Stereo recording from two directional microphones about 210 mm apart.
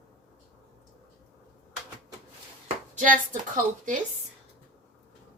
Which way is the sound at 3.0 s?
40° right (ahead or behind).